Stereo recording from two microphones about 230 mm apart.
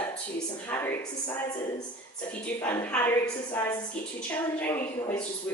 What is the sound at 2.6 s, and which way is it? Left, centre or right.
A woman's voice, centre.